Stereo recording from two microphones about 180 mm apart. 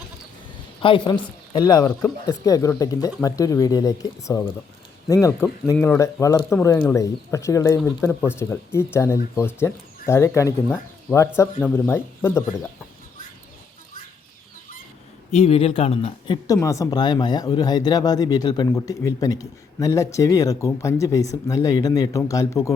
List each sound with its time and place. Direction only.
0.8 s speech: 30° left (ahead or behind); by 12.4 s 10° left (ahead or behind)
15.3 s speech: 35° left (ahead or behind)
16.6 s speech: 15° left (ahead or behind)